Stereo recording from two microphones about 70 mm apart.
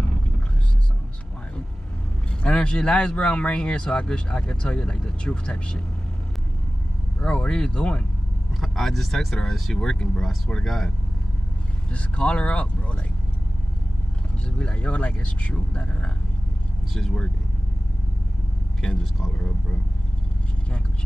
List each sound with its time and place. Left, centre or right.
2.4 s speech: centre
7.2 s speech: centre
8.5 s speech: centre
11.9 s speech: centre
14.6 s speech: centre
19.3 s speech: centre